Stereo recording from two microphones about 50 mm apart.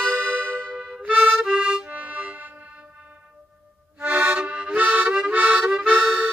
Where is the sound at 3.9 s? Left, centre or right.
Right.